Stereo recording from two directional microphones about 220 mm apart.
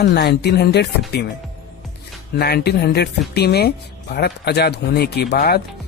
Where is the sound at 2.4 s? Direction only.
45° left (ahead or behind).